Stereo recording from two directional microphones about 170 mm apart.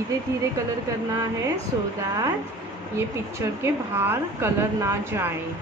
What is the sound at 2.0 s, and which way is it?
A woman's voice, 15° right (ahead or behind).